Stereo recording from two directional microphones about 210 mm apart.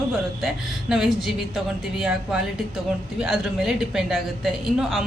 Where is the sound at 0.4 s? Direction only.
Centre (ahead or behind).